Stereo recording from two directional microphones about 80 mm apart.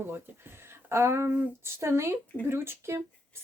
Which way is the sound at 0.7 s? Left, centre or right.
Right.